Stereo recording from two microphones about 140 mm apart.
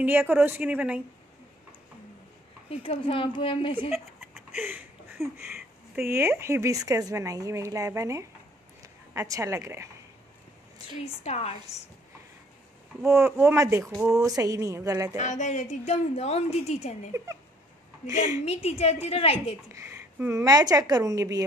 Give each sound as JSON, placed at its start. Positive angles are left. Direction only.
{"t": 0.0, "sound": "a woman's voice", "side_deg": -15}
{"t": 2.7, "sound": "speech", "side_deg": 45}
{"t": 3.9, "sound": "a sound", "side_deg": 0}
{"t": 4.6, "sound": "a sound", "side_deg": -15}
{"t": 5.9, "sound": "a woman's voice", "side_deg": -15}
{"t": 11.0, "sound": "a woman's voice", "side_deg": 45}
{"t": 13.0, "sound": "speech", "side_deg": -20}
{"t": 13.8, "sound": "a sound", "side_deg": -5}
{"t": 14.1, "sound": "speech", "side_deg": -25}
{"t": 15.1, "sound": "a woman's voice", "side_deg": 60}
{"t": 18.4, "sound": "a woman's voice", "side_deg": 50}
{"t": 19.7, "sound": "speech", "side_deg": -20}